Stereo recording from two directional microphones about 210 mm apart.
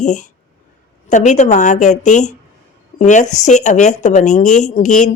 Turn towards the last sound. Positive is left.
turn(degrees=35)  # may be behind; listen again after turning